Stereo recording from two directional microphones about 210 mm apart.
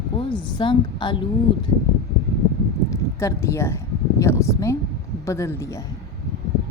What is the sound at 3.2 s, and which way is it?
A woman's voice, 15° left (ahead or behind).